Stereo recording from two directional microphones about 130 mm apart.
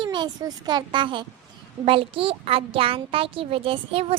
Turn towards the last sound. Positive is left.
turn(degrees=-45)  # may be behind; listen again after turning